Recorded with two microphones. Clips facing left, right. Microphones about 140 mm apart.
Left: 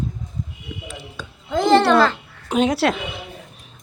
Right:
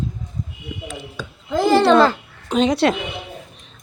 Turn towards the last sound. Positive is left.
turn(degrees=0)  # may be behind; listen again after turning